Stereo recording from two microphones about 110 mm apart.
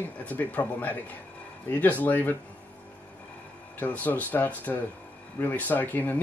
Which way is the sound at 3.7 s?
15° left (ahead or behind).